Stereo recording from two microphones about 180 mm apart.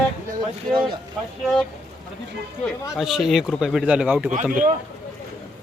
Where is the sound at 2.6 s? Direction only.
Centre (ahead or behind).